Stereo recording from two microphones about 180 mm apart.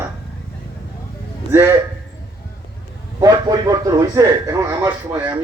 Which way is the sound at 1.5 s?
15° right (ahead or behind).